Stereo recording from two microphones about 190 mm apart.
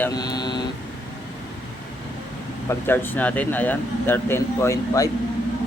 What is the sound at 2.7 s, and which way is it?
Speech, 10° left (ahead or behind).